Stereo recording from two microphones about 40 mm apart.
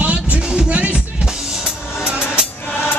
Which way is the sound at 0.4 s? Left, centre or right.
Right.